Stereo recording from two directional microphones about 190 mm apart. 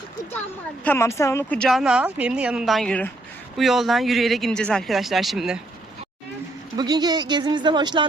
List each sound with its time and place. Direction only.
0.9 s a woman's voice: 15° left (ahead or behind)
6.7 s speech: 20° right (ahead or behind)